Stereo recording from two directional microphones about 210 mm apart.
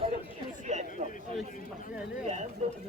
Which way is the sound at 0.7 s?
35° right (ahead or behind).